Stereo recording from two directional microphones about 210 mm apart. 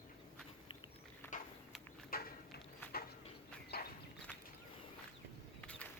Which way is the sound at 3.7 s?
45° left (ahead or behind).